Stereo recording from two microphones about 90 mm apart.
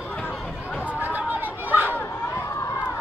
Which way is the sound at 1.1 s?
20° right (ahead or behind).